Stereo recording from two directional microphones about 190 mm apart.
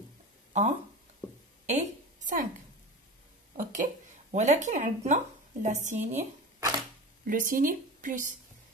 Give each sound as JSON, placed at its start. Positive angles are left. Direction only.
{"t": 0.5, "sound": "a sound", "side_deg": -35}
{"t": 3.5, "sound": "speech", "side_deg": -40}
{"t": 7.2, "sound": "speech", "side_deg": -45}